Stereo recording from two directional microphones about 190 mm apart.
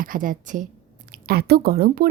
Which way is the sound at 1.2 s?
55° right (ahead or behind).